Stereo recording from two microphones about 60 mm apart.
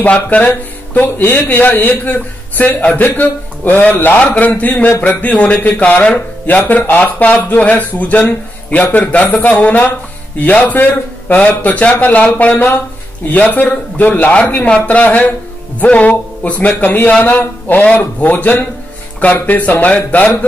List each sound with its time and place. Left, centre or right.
0.0 s a man's voice: left